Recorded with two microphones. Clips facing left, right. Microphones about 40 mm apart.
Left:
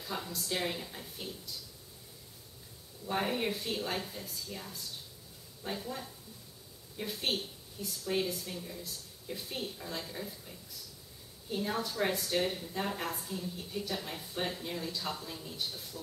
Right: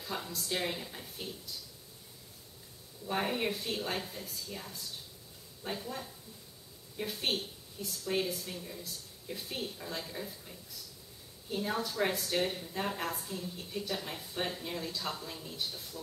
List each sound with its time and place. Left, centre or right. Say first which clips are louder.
0.0 s a woman's voice: even; centre
3.1 s a woman's voice: even; centre
11.5 s a woman's voice: even; centre